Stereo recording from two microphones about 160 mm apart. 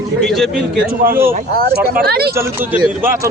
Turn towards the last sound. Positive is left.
turn(degrees=-10)  # may be behind; listen again after turning